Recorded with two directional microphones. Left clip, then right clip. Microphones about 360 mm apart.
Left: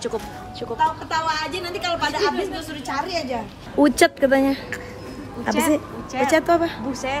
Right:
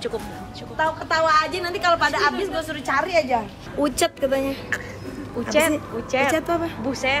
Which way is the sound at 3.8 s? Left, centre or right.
Left.